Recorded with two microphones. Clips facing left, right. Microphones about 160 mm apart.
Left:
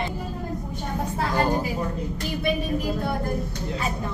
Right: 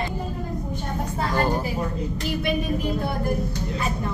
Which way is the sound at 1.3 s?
15° left (ahead or behind).